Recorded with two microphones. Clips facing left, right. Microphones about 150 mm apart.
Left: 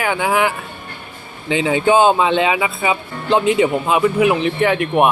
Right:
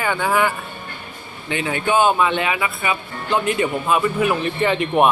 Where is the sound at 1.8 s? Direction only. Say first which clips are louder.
Left 3 dB; 25° left (ahead or behind).